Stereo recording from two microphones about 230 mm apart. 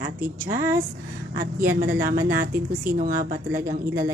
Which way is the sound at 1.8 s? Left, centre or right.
Right.